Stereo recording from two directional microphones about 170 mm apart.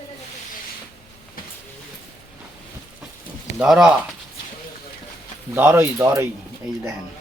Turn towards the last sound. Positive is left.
turn(degrees=-15)  # may be behind; listen again after turning